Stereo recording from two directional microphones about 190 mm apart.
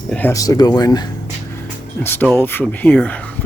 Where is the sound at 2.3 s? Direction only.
10° left (ahead or behind).